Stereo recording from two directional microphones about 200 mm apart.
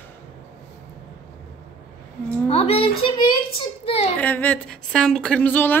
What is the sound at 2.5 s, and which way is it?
Speech, 30° left (ahead or behind).